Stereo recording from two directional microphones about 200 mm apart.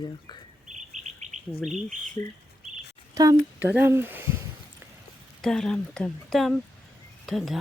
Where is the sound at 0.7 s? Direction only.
35° right (ahead or behind).